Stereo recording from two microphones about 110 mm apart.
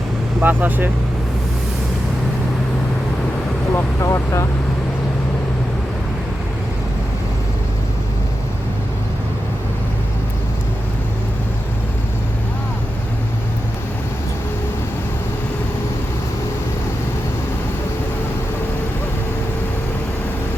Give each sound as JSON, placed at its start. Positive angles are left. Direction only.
{"t": 0.3, "sound": "speech", "side_deg": -15}
{"t": 3.7, "sound": "speech", "side_deg": 25}